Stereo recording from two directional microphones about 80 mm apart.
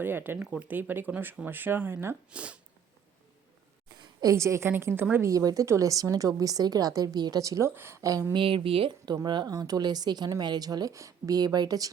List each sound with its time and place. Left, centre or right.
0.0 s speech: right
2.3 s speech: centre
4.2 s a woman's voice: right
5.3 s a woman's voice: right
7.8 s a woman's voice: right
8.3 s speech: right
9.2 s a woman's voice: right